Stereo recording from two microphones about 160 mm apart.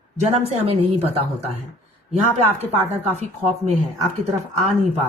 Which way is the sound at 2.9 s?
45° right (ahead or behind).